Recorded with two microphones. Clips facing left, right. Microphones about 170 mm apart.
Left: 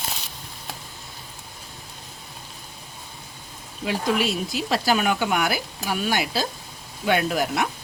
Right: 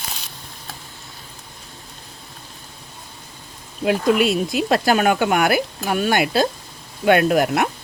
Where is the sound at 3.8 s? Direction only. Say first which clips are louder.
Right 6 dB; 60° right (ahead or behind).